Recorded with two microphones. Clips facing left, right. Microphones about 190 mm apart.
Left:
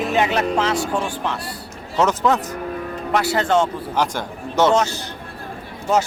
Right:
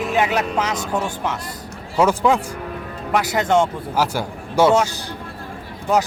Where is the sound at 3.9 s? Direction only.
10° right (ahead or behind).